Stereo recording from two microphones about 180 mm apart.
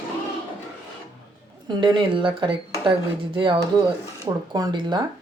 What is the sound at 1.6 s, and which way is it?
Speech, 25° right (ahead or behind).